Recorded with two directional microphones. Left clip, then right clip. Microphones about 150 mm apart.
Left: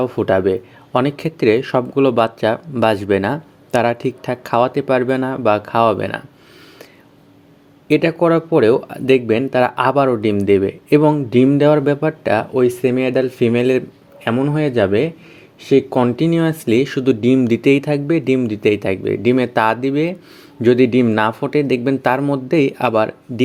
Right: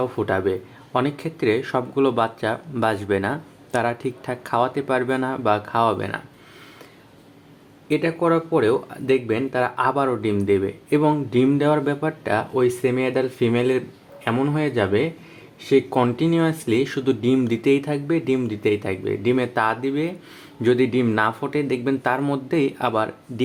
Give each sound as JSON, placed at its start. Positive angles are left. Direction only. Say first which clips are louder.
{"t": 0.0, "sound": "speech", "louder": "left 6 dB", "side_deg": 35}
{"t": 7.9, "sound": "speech", "louder": "left 6 dB", "side_deg": 50}